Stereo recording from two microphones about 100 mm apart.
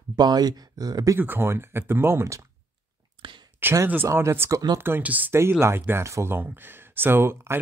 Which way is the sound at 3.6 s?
25° right (ahead or behind).